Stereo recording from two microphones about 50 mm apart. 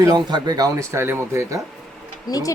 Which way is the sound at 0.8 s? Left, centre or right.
Right.